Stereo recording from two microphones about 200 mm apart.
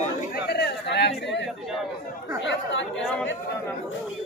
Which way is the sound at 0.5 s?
55° left (ahead or behind).